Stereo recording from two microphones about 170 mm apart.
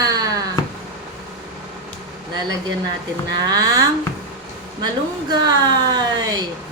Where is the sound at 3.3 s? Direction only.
25° right (ahead or behind).